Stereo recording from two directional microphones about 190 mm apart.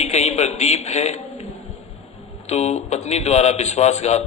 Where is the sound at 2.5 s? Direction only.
35° left (ahead or behind).